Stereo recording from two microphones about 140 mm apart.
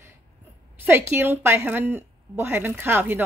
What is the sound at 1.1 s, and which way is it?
Speech, 15° right (ahead or behind).